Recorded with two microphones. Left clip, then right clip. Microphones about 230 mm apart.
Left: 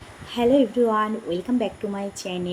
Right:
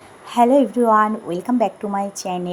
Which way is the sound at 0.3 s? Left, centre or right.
Right.